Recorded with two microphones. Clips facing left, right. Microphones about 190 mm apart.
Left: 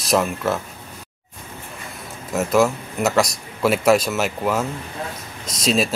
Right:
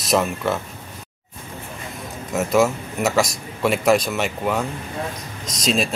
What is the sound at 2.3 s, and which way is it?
A man's voice, centre (ahead or behind).